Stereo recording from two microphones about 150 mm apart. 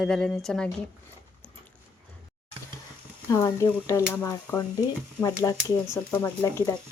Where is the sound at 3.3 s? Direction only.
20° left (ahead or behind).